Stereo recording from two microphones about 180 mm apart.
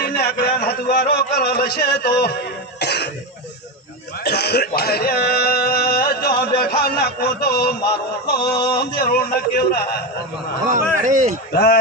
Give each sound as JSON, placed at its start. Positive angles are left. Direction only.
{"t": 0.0, "sound": "a man's voice", "side_deg": 60}
{"t": 2.7, "sound": "cough", "side_deg": 65}
{"t": 4.2, "sound": "a man's voice", "side_deg": 65}
{"t": 11.0, "sound": "speech", "side_deg": -45}
{"t": 11.5, "sound": "a man's voice", "side_deg": 65}